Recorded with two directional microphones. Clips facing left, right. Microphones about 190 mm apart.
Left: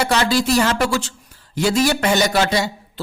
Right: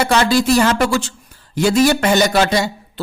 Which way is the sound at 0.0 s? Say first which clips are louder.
Right 3 dB; 50° right (ahead or behind).